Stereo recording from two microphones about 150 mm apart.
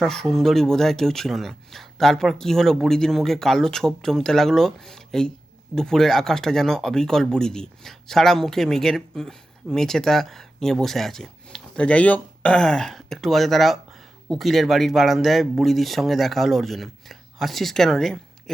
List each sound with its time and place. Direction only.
0.0 s speech: centre (ahead or behind)